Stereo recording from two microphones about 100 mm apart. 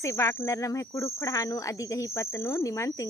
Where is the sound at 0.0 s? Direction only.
30° left (ahead or behind).